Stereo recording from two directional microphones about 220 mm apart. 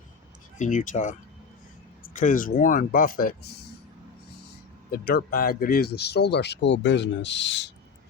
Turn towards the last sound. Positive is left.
turn(degrees=55)  # may be behind; listen again after turning